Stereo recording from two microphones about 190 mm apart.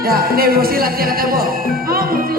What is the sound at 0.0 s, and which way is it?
Speech, 50° right (ahead or behind).